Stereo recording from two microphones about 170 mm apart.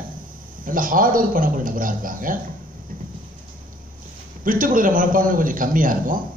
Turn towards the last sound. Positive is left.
turn(degrees=-55)  # may be behind; listen again after turning